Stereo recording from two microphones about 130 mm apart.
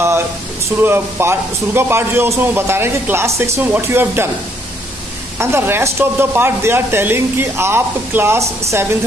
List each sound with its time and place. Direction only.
0.7 s speech: 15° right (ahead or behind)
5.4 s speech: 20° right (ahead or behind)